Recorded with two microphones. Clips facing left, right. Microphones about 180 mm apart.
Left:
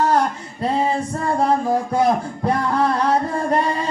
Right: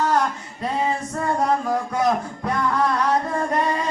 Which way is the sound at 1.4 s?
30° left (ahead or behind).